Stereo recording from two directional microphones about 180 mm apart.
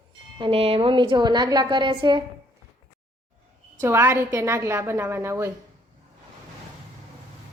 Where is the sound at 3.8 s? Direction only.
15° right (ahead or behind).